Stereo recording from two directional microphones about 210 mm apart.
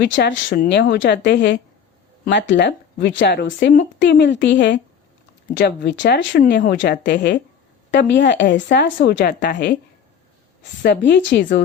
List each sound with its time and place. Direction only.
0.0 s speech: 55° left (ahead or behind)
0.5 s speech: 45° left (ahead or behind)